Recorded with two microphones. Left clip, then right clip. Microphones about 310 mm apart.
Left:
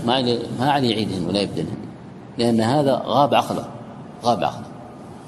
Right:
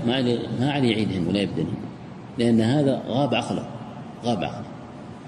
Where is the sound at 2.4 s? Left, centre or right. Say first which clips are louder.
Left 3 dB; left.